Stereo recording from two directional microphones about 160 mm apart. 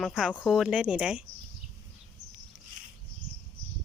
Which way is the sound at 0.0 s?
Centre (ahead or behind).